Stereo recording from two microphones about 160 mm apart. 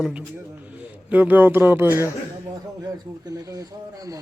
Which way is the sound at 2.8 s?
25° right (ahead or behind).